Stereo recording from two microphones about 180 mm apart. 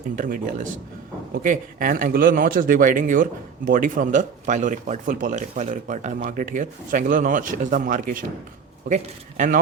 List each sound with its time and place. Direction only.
0.2 s speech: 45° right (ahead or behind)